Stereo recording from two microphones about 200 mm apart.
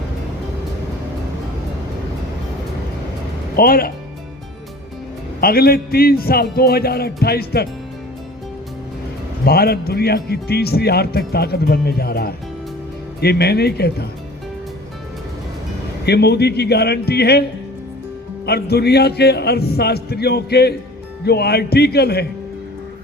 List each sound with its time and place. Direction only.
3.5 s speech: 50° left (ahead or behind)
5.4 s speech: 50° left (ahead or behind)
9.4 s speech: 50° left (ahead or behind)
16.0 s a man's voice: 55° left (ahead or behind)
18.4 s speech: 55° left (ahead or behind)